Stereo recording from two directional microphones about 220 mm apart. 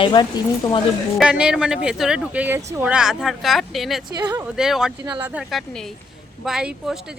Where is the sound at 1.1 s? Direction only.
5° right (ahead or behind).